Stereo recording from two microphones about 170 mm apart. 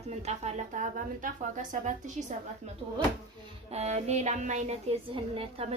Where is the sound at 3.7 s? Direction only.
40° right (ahead or behind).